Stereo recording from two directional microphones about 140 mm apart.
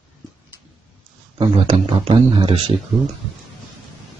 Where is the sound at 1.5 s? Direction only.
45° right (ahead or behind).